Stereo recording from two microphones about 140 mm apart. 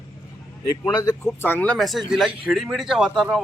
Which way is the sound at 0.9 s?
25° left (ahead or behind).